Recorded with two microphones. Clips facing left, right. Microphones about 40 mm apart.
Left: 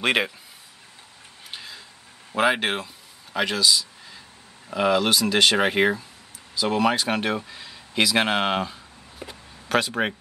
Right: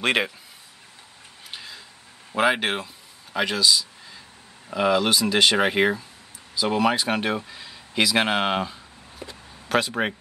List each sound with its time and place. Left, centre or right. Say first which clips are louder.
0.0 s speech: even; centre
1.5 s a sound: even; centre
2.3 s speech: even; centre
9.2 s speech: even; centre
9.7 s speech: even; centre